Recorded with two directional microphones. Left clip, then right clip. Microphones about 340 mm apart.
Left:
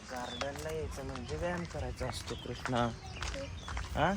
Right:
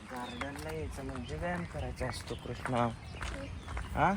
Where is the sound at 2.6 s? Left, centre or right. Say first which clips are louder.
Right 1 dB; centre.